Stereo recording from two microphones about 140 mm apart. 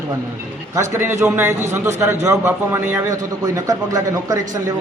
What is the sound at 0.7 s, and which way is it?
A man's voice, 20° right (ahead or behind).